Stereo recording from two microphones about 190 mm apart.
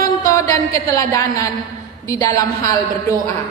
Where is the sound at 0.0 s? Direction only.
15° left (ahead or behind).